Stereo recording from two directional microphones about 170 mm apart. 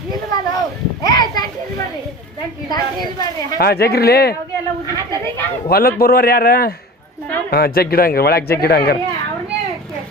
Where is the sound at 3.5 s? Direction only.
65° left (ahead or behind).